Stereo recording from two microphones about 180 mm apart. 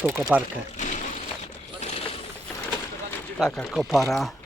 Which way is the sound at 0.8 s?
45° left (ahead or behind).